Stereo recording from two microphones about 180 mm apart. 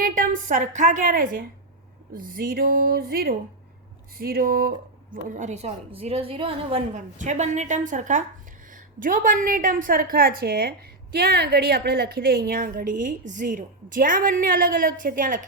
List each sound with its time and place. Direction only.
0.0 s a woman's voice: 50° right (ahead or behind)
5.1 s a woman's voice: 45° right (ahead or behind)